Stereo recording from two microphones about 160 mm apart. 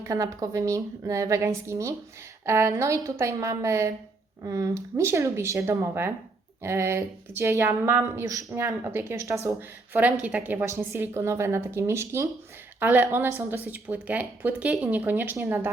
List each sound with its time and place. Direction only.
0.0 s a woman's voice: 20° right (ahead or behind)